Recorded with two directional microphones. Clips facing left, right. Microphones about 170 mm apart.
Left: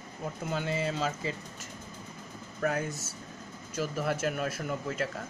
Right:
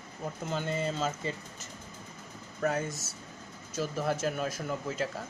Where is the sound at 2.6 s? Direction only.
5° right (ahead or behind).